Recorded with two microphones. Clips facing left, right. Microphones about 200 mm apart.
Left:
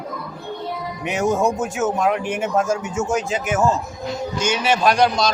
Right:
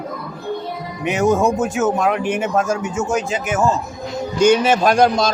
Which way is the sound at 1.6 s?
90° right.